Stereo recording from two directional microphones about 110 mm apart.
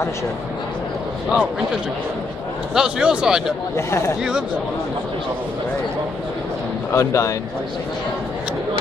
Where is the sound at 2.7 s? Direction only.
5° right (ahead or behind).